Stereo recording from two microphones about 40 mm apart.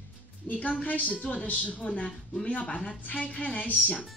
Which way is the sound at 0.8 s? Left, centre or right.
Left.